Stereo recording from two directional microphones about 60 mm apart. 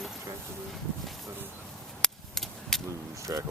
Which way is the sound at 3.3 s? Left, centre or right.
Right.